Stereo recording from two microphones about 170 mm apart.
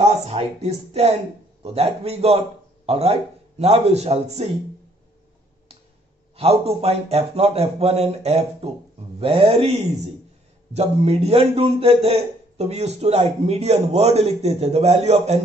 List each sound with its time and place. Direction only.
0.0 s a man's voice: 35° right (ahead or behind)
6.3 s a man's voice: 35° right (ahead or behind)